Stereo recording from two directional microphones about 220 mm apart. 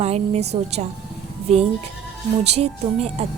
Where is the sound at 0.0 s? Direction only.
30° right (ahead or behind).